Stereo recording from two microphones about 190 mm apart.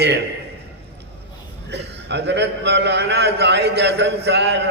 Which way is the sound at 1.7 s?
65° right (ahead or behind).